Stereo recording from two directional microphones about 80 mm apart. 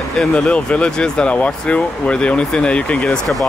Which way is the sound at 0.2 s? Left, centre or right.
Centre.